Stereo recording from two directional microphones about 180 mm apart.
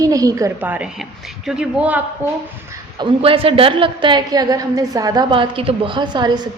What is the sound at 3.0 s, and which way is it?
A woman's voice, 30° right (ahead or behind).